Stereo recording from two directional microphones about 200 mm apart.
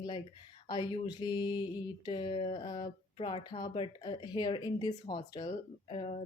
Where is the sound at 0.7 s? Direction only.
25° left (ahead or behind).